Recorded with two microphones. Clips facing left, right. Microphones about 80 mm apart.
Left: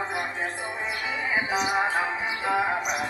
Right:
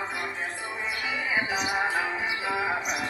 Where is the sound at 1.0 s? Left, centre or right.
Left.